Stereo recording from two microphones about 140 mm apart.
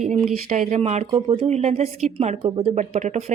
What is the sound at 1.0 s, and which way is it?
A woman's voice, 40° right (ahead or behind).